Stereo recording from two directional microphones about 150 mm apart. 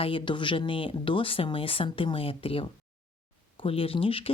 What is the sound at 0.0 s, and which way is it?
Speech, 35° left (ahead or behind).